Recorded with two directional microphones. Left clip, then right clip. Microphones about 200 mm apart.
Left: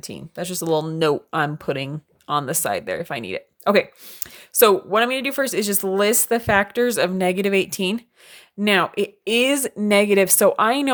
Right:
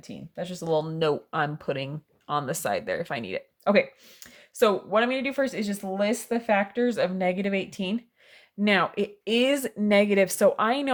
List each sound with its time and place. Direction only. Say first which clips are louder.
0.0 s speech: left 5 dB; 40° left (ahead or behind)
8.6 s speech: left 5 dB; 25° left (ahead or behind)